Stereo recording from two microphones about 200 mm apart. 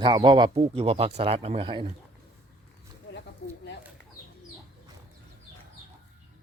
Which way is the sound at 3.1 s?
60° left (ahead or behind).